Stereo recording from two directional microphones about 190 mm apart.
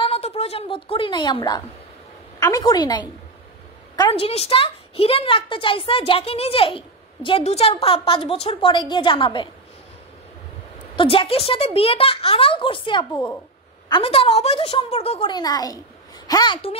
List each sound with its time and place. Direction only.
0.0 s a woman's voice: 30° left (ahead or behind)
11.0 s a woman's voice: 30° left (ahead or behind)